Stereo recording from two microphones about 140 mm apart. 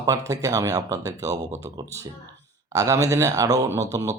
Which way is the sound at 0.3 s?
25° right (ahead or behind).